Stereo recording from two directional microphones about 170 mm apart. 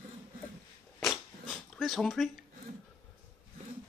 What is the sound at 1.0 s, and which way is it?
Dog, centre (ahead or behind).